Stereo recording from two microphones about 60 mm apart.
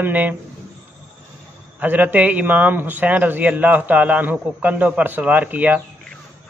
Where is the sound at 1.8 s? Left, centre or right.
Right.